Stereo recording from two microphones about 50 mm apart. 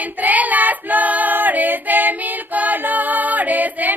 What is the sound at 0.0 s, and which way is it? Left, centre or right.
Child singing, right.